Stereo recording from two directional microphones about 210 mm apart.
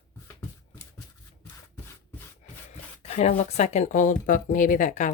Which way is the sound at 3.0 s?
35° left (ahead or behind).